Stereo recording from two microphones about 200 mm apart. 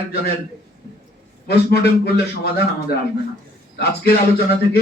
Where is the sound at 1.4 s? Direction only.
55° left (ahead or behind).